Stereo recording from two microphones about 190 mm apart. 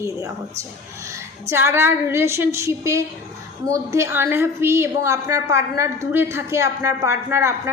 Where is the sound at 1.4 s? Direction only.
15° right (ahead or behind).